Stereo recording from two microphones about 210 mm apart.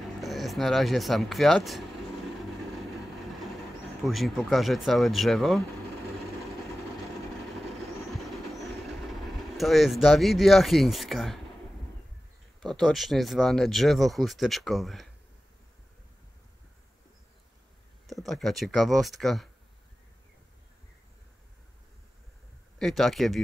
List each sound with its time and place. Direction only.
0.0 s speech: centre (ahead or behind)
3.2 s train: centre (ahead or behind)
4.0 s speech: centre (ahead or behind)
8.3 s vehicle: centre (ahead or behind)
12.6 s speech: centre (ahead or behind)
18.0 s speech: centre (ahead or behind)
22.8 s speech: centre (ahead or behind)